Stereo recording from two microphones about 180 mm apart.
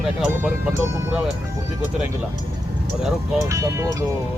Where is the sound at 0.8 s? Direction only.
15° right (ahead or behind).